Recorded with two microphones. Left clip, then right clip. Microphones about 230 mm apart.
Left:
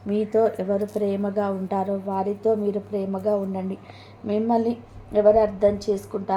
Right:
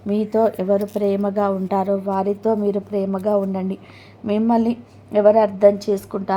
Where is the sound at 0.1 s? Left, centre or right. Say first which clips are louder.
Right 2 dB; right.